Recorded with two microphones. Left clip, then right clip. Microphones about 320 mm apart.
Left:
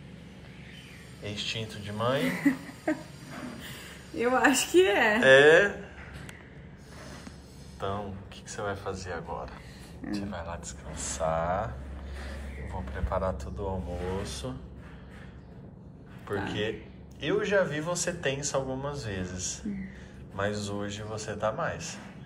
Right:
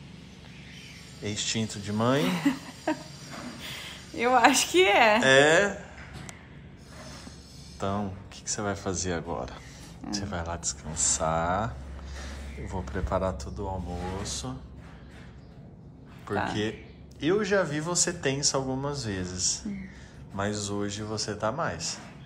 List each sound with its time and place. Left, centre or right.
1.2 s speech: centre
2.3 s speech: right
4.2 s speech: centre
8.5 s speech: centre
12.9 s speech: centre
16.3 s speech: centre